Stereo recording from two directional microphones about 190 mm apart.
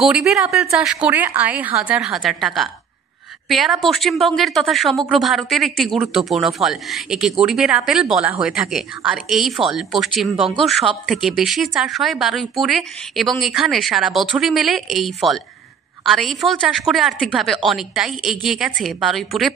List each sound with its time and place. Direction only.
0.0 s a woman's voice: centre (ahead or behind)